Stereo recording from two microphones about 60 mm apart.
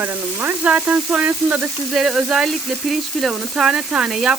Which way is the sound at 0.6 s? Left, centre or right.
Right.